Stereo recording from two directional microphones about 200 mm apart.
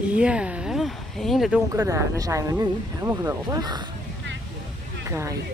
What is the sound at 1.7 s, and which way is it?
Speech, 15° right (ahead or behind).